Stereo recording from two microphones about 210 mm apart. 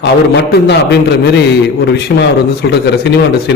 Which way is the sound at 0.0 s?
55° left (ahead or behind).